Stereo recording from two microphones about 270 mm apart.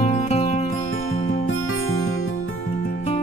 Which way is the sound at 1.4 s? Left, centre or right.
Left.